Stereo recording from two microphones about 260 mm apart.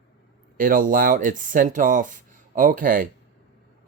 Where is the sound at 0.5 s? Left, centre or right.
Right.